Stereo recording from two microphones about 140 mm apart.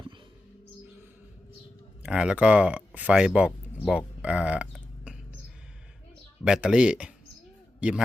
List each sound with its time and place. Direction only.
2.0 s speech: 5° right (ahead or behind)
6.4 s a man's voice: 5° right (ahead or behind)